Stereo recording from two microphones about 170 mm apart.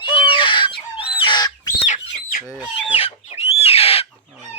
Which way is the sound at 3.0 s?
35° left (ahead or behind).